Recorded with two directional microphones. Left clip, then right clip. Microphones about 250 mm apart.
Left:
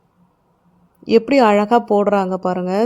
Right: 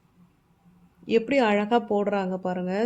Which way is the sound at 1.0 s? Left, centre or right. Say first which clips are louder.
Left 9 dB; left.